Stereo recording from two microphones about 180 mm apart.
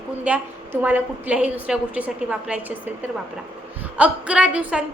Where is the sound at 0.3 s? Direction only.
10° right (ahead or behind).